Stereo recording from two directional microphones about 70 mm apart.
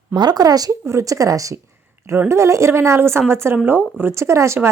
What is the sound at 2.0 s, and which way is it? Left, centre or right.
A woman's voice, right.